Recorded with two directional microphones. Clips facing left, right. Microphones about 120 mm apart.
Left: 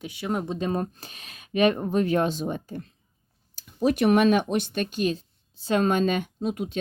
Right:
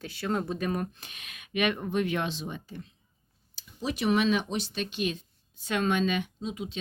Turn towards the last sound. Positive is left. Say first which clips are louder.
# left 7 dB
turn(degrees=55)  # may be behind; listen again after turning